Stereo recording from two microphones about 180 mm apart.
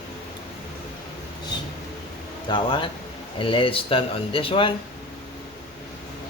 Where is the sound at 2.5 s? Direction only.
25° left (ahead or behind).